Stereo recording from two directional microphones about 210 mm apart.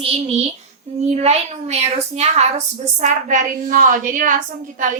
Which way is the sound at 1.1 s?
30° right (ahead or behind).